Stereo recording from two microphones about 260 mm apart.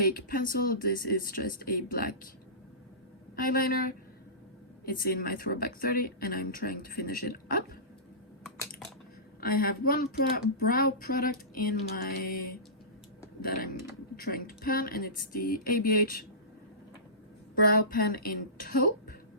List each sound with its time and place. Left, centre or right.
0.0 s speech: left
3.3 s speech: left
9.4 s speech: left
17.5 s speech: left